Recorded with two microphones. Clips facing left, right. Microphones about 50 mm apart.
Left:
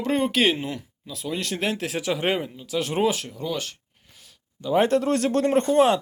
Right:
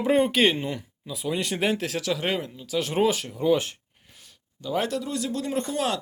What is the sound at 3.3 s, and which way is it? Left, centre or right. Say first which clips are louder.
Speech: right 7 dB; centre.